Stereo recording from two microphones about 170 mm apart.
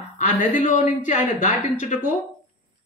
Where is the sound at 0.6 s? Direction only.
45° left (ahead or behind).